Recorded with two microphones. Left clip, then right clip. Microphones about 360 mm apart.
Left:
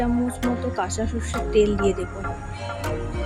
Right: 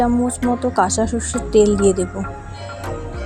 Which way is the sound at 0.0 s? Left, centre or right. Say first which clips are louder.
Right 6 dB; centre.